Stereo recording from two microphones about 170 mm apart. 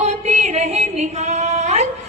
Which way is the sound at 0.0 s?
40° right (ahead or behind).